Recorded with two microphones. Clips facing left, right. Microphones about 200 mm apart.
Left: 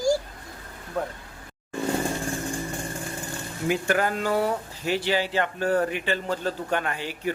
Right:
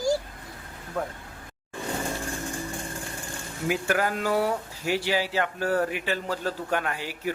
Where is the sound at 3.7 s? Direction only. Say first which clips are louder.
Left 2 dB; 5° right (ahead or behind).